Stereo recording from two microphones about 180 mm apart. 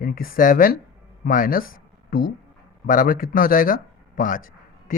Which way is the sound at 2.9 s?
50° left (ahead or behind).